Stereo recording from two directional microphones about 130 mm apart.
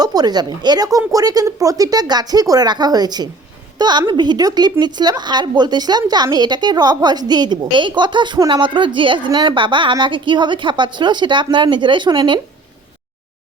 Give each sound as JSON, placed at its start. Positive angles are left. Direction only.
{"t": 0.0, "sound": "a woman's voice", "side_deg": -30}